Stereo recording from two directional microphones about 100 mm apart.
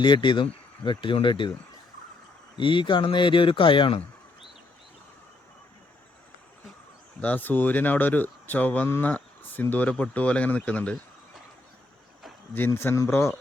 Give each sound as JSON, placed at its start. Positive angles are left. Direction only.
{"t": 0.0, "sound": "speech", "side_deg": 50}
{"t": 2.6, "sound": "speech", "side_deg": 55}
{"t": 7.2, "sound": "speech", "side_deg": 15}
{"t": 12.5, "sound": "speech", "side_deg": 20}